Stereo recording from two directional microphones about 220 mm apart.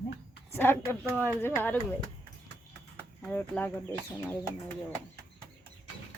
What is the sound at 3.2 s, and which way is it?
Speech, 5° left (ahead or behind).